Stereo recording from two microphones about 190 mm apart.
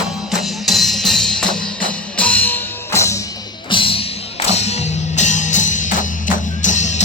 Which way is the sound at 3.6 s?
25° left (ahead or behind).